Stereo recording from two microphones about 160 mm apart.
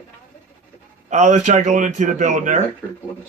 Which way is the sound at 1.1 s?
50° right (ahead or behind).